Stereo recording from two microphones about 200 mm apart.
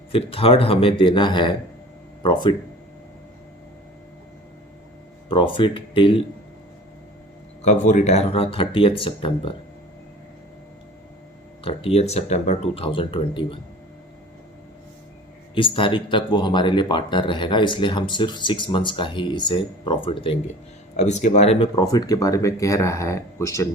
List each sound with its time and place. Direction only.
0.1 s speech: 30° left (ahead or behind)
5.3 s speech: 25° left (ahead or behind)
7.6 s speech: 35° left (ahead or behind)
11.6 s speech: 30° left (ahead or behind)
15.5 s speech: 25° left (ahead or behind)
21.8 s speech: 20° left (ahead or behind)